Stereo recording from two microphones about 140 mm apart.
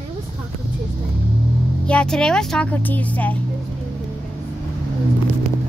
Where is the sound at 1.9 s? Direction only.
5° left (ahead or behind).